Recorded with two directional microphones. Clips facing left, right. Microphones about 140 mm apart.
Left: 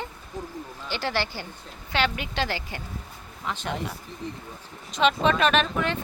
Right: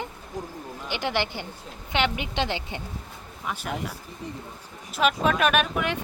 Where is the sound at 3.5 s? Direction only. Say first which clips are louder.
Left 1 dB; 10° right (ahead or behind).